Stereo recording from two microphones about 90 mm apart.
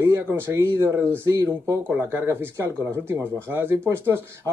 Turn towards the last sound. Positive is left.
turn(degrees=-25)  # may be behind; listen again after turning